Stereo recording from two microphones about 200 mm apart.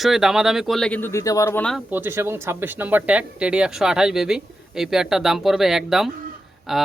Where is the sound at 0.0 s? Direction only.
Centre (ahead or behind).